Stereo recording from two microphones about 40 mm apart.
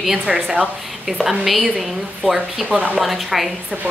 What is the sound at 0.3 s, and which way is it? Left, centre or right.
Speech, right.